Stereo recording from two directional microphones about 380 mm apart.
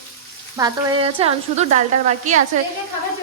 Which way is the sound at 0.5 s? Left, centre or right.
Centre.